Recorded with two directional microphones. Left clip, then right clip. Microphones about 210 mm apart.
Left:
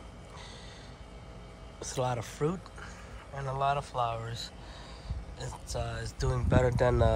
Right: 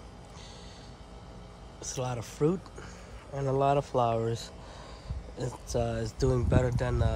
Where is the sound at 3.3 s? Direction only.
35° right (ahead or behind).